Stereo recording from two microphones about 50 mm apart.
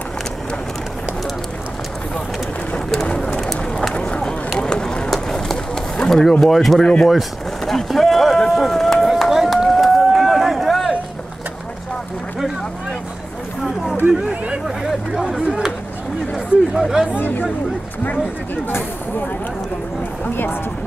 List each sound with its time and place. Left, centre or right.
3.2 s bird: centre
3.9 s run: left
5.1 s run: centre
6.0 s a sound: left
6.4 s speech: centre
9.1 s run: centre
14.0 s speech: right
14.8 s speech: centre
17.2 s speech: left
18.7 s speech: left